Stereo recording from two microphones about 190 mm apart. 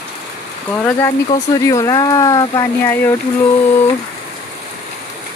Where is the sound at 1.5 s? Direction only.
20° left (ahead or behind).